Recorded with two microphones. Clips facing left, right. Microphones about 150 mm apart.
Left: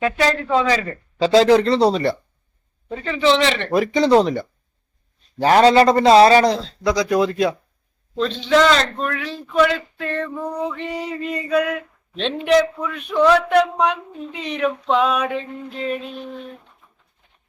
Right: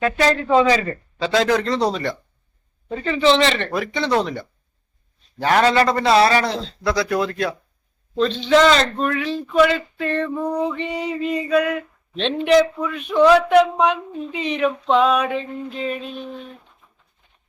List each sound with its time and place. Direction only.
0.0 s speech: centre (ahead or behind)
1.2 s a man's voice: 30° left (ahead or behind)
2.9 s speech: centre (ahead or behind)
3.3 s speech: 10° left (ahead or behind)
3.8 s a man's voice: 35° left (ahead or behind); by 7.5 s 15° left (ahead or behind)
8.1 s speech: centre (ahead or behind)
10.4 s music: 15° right (ahead or behind)
10.8 s speech: centre (ahead or behind)